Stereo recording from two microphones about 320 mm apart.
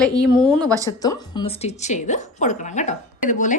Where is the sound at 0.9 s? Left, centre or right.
Centre.